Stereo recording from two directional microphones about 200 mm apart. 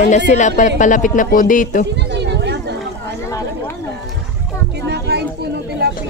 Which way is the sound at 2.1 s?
60° right (ahead or behind).